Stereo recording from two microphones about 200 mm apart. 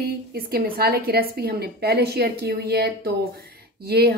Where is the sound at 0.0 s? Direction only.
50° right (ahead or behind).